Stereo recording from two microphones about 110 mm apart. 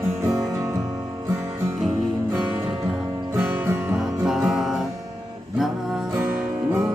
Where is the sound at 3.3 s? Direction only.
20° right (ahead or behind).